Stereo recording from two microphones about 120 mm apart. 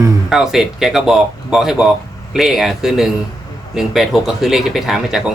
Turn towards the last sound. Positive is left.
turn(degrees=-5)  # may be behind; listen again after turning